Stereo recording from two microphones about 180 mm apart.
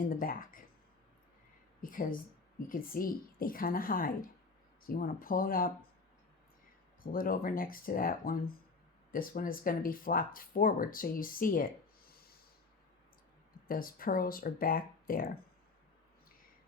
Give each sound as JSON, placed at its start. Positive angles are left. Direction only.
{"t": 0.1, "sound": "speech", "side_deg": 50}
{"t": 1.8, "sound": "speech", "side_deg": 50}
{"t": 7.0, "sound": "speech", "side_deg": 50}
{"t": 13.7, "sound": "speech", "side_deg": 55}